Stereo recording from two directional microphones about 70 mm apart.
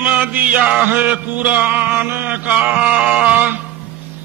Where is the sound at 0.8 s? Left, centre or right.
Right.